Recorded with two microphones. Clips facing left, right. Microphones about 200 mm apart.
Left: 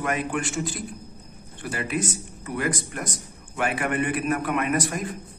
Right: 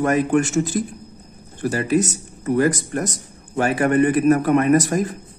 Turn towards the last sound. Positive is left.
turn(degrees=-40)  # may be behind; listen again after turning